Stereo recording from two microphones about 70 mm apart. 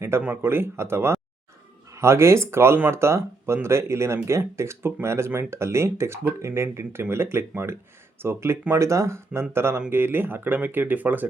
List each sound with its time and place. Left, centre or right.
0.4 s speech: right